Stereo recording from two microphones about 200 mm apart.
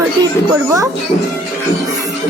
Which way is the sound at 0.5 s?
15° right (ahead or behind).